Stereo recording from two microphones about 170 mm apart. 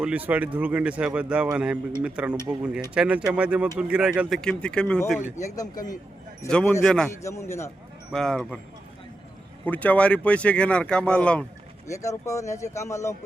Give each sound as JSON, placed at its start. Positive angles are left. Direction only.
{"t": 0.0, "sound": "speech", "side_deg": -10}
{"t": 5.4, "sound": "speech", "side_deg": 20}
{"t": 6.5, "sound": "speech", "side_deg": 5}
{"t": 7.2, "sound": "speech", "side_deg": 15}
{"t": 8.1, "sound": "speech", "side_deg": 5}
{"t": 9.6, "sound": "speech", "side_deg": 10}
{"t": 11.9, "sound": "speech", "side_deg": 15}